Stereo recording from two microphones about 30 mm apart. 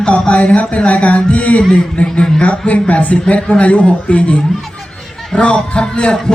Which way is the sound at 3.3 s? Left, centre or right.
Left.